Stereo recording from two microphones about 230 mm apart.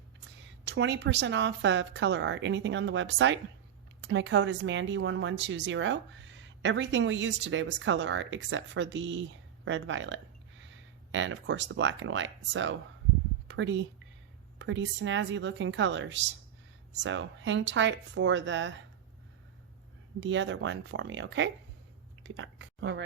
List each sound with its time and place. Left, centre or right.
0.6 s a woman's voice: right
20.1 s a woman's voice: right